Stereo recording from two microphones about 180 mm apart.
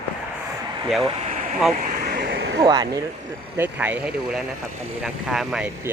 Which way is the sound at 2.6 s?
20° right (ahead or behind).